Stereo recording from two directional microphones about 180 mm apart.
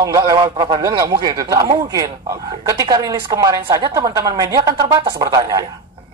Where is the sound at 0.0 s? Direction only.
20° right (ahead or behind).